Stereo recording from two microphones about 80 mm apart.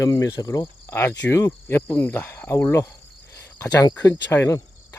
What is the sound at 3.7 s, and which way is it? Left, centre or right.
Speech, left.